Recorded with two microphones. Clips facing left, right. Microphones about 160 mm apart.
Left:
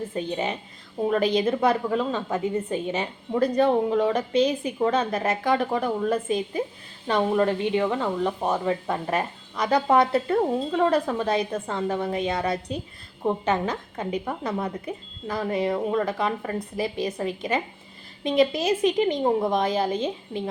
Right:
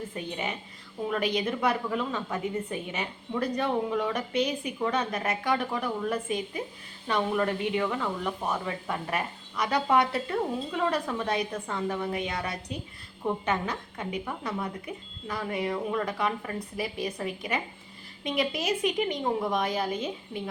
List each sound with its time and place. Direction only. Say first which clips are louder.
0.1 s a woman's voice: left 6 dB; 30° left (ahead or behind)
11.3 s a woman's voice: left 5 dB; 25° left (ahead or behind)